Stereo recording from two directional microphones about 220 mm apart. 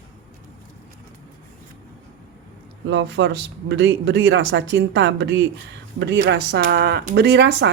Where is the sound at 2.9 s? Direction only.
55° right (ahead or behind).